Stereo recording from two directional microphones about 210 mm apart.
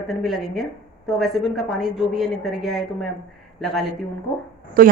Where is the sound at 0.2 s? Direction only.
Centre (ahead or behind).